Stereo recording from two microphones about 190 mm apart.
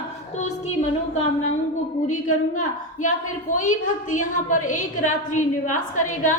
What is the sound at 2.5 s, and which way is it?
A woman's voice, 40° left (ahead or behind).